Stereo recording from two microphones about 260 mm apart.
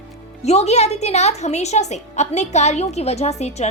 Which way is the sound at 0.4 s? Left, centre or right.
Left.